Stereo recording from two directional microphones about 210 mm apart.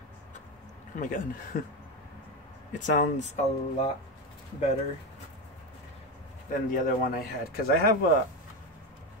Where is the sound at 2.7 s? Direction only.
40° left (ahead or behind).